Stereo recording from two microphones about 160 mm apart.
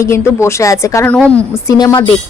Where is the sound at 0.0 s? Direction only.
15° left (ahead or behind).